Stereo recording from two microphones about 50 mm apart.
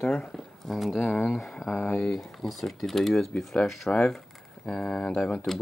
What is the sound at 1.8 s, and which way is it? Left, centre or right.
Speech, left.